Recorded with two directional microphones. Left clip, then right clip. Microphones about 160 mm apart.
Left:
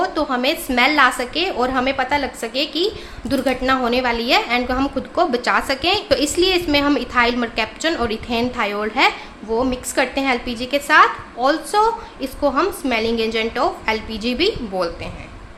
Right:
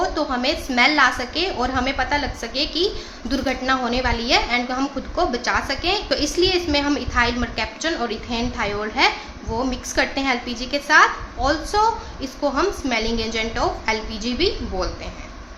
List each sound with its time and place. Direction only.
0.0 s a woman's voice: 35° left (ahead or behind)